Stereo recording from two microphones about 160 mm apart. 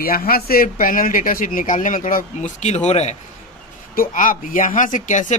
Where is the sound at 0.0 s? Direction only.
70° left (ahead or behind); by 3.2 s 45° left (ahead or behind).